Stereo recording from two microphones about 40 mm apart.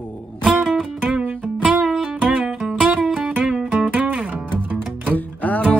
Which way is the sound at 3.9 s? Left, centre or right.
Right.